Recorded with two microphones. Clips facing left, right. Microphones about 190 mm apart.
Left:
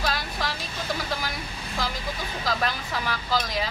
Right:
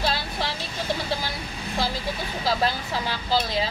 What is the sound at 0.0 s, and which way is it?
Vehicle, 30° right (ahead or behind).